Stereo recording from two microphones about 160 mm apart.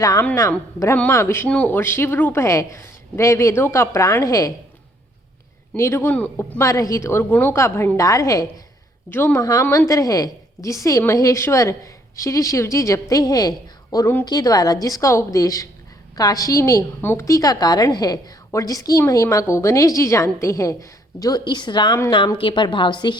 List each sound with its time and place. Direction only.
0.0 s a woman's voice: 20° left (ahead or behind)
5.7 s speech: 15° left (ahead or behind)
6.6 s a woman's voice: 20° left (ahead or behind)